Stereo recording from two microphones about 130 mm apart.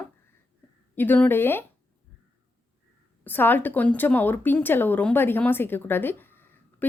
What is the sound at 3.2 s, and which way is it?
A woman's voice, 15° left (ahead or behind).